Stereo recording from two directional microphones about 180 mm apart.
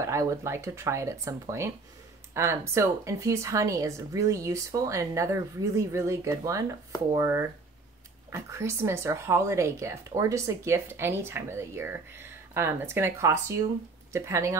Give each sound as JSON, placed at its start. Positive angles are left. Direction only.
{"t": 0.0, "sound": "speech", "side_deg": -15}